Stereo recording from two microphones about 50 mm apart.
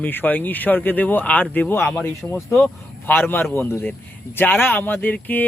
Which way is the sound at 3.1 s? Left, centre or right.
Left.